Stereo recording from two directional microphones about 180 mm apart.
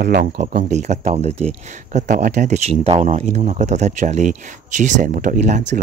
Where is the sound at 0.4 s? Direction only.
45° right (ahead or behind).